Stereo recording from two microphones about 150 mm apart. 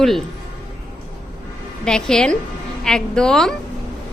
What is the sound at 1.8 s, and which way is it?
A woman's voice, 5° left (ahead or behind).